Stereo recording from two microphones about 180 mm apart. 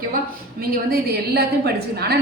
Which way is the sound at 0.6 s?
60° right (ahead or behind).